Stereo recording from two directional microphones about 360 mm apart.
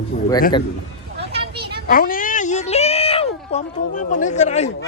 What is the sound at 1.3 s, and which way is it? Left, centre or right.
Children playing, centre.